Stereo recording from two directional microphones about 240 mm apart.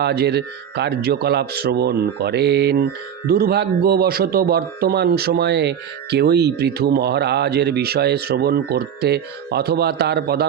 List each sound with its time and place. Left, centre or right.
0.0 s speech: right